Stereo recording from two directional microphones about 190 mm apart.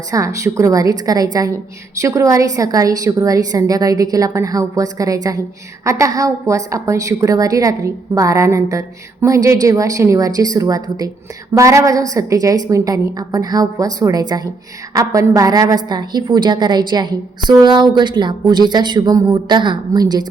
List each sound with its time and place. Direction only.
0.1 s a woman's voice: 15° right (ahead or behind)